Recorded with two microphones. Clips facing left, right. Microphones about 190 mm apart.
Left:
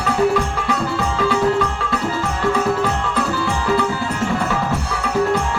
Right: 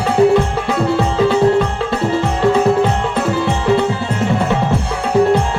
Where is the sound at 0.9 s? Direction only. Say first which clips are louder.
Right 6 dB; 25° right (ahead or behind).